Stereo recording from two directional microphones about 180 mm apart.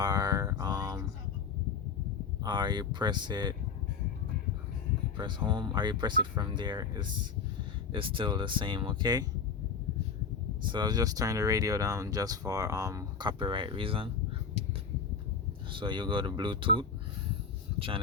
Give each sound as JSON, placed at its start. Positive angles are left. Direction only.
{"t": 0.0, "sound": "a sound", "side_deg": -20}
{"t": 2.4, "sound": "speech", "side_deg": -25}
{"t": 5.1, "sound": "speech", "side_deg": -25}
{"t": 10.6, "sound": "speech", "side_deg": -25}
{"t": 15.7, "sound": "speech", "side_deg": -25}